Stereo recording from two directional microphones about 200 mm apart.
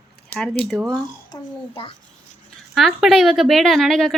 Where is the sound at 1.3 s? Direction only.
25° left (ahead or behind).